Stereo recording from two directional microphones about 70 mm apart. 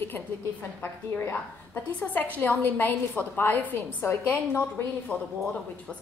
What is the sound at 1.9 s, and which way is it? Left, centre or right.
A woman's voice, left.